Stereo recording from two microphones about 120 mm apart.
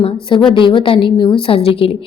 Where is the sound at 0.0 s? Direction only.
45° left (ahead or behind).